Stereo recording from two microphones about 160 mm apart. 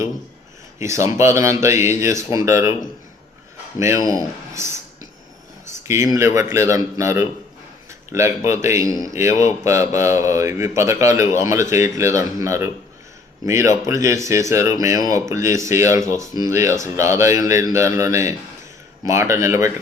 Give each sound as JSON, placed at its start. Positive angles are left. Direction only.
{"t": 0.8, "sound": "speech", "side_deg": -20}
{"t": 3.8, "sound": "a man's voice", "side_deg": -20}
{"t": 5.9, "sound": "a man's voice", "side_deg": -15}